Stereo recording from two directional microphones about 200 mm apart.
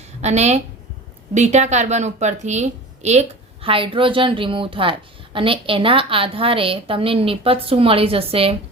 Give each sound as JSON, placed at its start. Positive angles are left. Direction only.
{"t": 0.2, "sound": "a woman's voice", "side_deg": -35}